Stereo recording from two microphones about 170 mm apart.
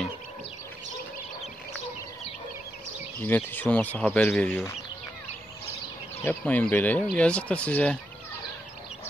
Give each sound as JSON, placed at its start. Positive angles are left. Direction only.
{"t": 3.2, "sound": "speech", "side_deg": 10}
{"t": 6.2, "sound": "speech", "side_deg": 10}